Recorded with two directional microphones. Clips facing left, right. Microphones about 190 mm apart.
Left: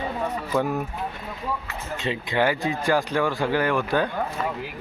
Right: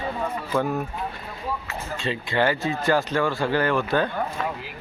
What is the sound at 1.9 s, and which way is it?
Speech, 20° left (ahead or behind).